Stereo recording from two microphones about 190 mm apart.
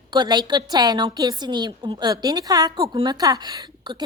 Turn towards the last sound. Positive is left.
turn(degrees=-25)  # may be behind; listen again after turning